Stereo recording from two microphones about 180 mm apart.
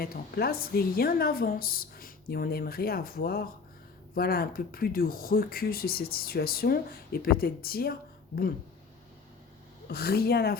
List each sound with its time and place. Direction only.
0.0 s speech: 60° left (ahead or behind)
9.9 s speech: 60° left (ahead or behind)